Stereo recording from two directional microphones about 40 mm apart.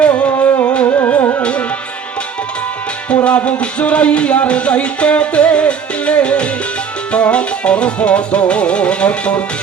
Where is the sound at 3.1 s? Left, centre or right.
Left.